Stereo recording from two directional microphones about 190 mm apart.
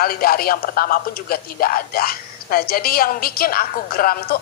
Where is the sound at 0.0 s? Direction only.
50° left (ahead or behind).